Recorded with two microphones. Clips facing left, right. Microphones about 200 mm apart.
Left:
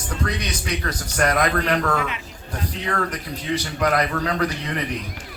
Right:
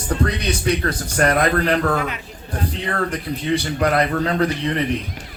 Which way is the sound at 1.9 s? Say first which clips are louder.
Right 2 dB; 45° right (ahead or behind).